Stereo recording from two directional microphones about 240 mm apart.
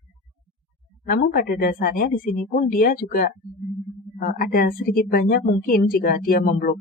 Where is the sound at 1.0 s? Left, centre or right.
Left.